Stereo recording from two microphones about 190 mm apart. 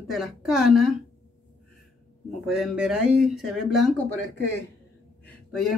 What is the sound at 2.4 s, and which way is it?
Speech, centre (ahead or behind).